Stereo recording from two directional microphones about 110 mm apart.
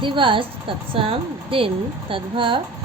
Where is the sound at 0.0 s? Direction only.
50° right (ahead or behind).